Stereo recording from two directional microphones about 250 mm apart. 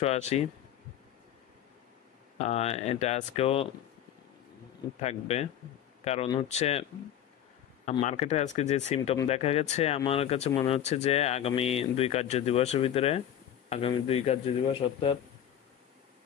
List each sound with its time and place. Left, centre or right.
0.0 s speech: left
2.3 s speech: left
5.0 s speech: left